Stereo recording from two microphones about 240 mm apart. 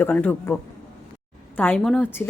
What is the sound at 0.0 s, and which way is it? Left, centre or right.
A woman's voice, centre.